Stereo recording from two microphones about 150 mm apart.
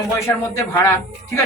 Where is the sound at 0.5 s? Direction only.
15° left (ahead or behind).